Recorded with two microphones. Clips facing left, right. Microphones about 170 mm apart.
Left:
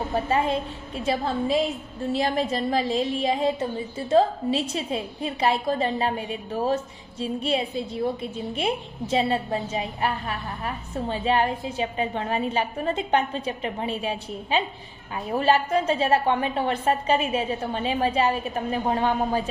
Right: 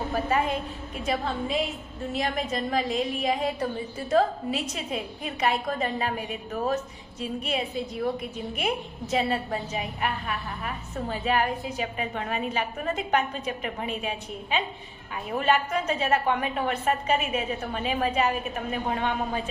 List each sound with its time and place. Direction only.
0.1 s a woman's voice: 25° left (ahead or behind)